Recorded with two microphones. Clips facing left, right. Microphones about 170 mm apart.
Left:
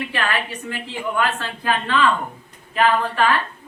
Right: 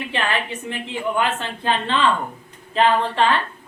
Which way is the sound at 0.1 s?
25° right (ahead or behind).